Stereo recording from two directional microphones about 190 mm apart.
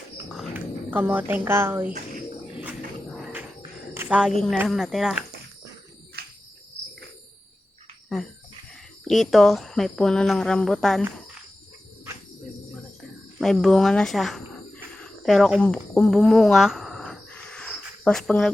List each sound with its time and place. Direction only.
0.3 s a woman's voice: 10° right (ahead or behind)
3.9 s a woman's voice: 10° right (ahead or behind)
6.2 s cricket: 55° right (ahead or behind)
9.0 s speech: centre (ahead or behind)
13.4 s speech: centre (ahead or behind)
14.9 s a sound: centre (ahead or behind)
15.6 s a sound: 10° left (ahead or behind)